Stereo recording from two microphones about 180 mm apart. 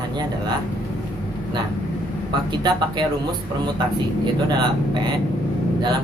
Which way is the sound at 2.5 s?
25° right (ahead or behind).